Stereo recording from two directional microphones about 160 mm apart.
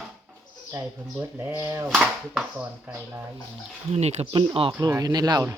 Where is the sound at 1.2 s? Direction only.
15° right (ahead or behind).